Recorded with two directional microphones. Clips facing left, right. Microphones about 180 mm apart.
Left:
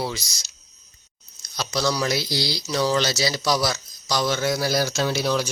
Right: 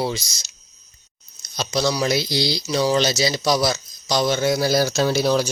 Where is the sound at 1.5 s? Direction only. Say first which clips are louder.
Right 2 dB; 20° right (ahead or behind).